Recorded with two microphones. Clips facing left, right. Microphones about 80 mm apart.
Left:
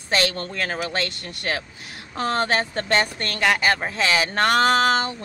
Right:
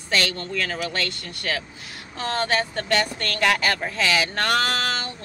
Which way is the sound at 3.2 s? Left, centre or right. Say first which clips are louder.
Even; centre.